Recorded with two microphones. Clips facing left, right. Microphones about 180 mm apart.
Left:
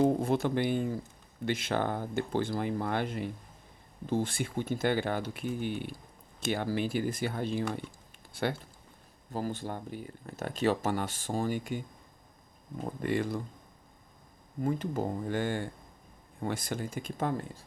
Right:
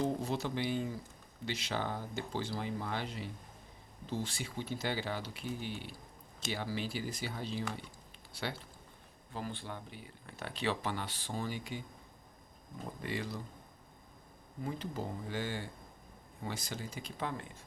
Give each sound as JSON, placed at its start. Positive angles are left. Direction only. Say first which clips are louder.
{"t": 0.0, "sound": "speech", "louder": "left 8 dB", "side_deg": 50}
{"t": 12.8, "sound": "speech", "louder": "left 8 dB", "side_deg": 55}
{"t": 14.6, "sound": "speech", "louder": "left 8 dB", "side_deg": 50}